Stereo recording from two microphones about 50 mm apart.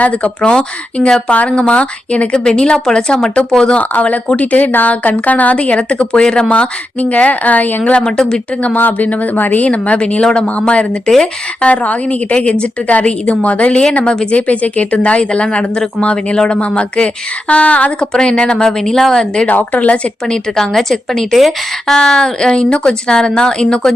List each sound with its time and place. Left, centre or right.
0.0 s a woman's voice: left
3.8 s a woman's voice: left
6.2 s speech: centre
6.5 s a woman's voice: left
8.6 s a woman's voice: left; by 19.5 s centre
19.5 s a woman's voice: left
20.2 s speech: centre
21.9 s speech: centre